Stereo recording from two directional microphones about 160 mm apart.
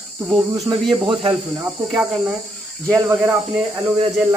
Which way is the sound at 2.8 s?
20° right (ahead or behind).